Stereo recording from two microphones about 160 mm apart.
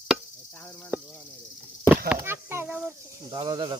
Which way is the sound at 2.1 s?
15° right (ahead or behind).